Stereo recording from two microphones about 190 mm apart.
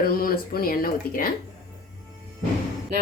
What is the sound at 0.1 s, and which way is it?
Speech, 50° left (ahead or behind).